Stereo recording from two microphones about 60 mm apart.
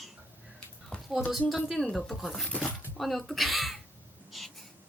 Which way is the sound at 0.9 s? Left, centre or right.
Centre.